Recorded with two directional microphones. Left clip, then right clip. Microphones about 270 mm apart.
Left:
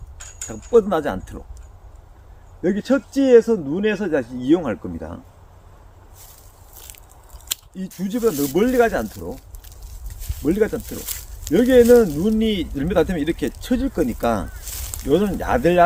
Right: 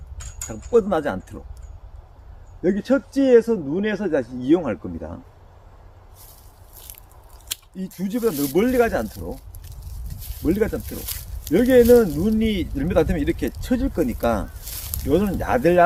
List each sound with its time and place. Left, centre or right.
0.4 s speech: centre
2.6 s speech: centre
7.4 s speech: centre